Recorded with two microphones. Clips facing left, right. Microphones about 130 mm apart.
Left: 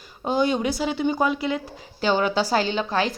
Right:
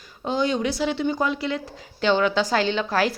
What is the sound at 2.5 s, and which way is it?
Speech, 40° left (ahead or behind).